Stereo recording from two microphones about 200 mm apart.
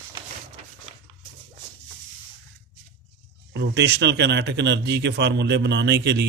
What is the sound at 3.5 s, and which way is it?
Speech, 60° right (ahead or behind).